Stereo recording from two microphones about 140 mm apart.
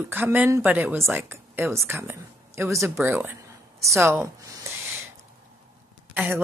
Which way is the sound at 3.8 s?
20° right (ahead or behind).